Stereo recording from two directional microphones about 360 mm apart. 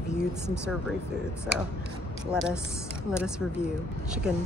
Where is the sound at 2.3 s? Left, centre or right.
Centre.